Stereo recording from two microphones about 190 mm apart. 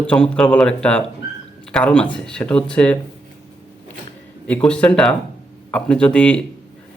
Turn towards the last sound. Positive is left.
turn(degrees=5)  # may be behind; listen again after turning